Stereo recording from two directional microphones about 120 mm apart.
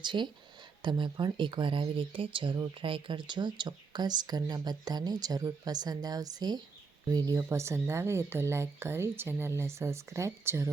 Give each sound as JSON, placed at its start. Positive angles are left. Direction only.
{"t": 0.0, "sound": "speech", "side_deg": -40}
{"t": 7.5, "sound": "a woman's voice", "side_deg": -25}